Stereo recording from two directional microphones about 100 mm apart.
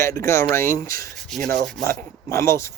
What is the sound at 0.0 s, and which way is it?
Speech, 30° left (ahead or behind).